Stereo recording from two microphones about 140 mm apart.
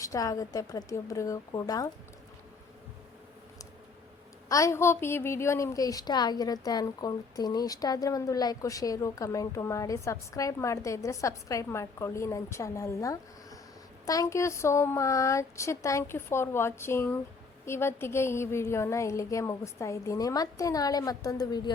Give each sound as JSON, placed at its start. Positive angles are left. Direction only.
{"t": 0.0, "sound": "a woman's voice", "side_deg": 25}
{"t": 4.4, "sound": "a woman's voice", "side_deg": 20}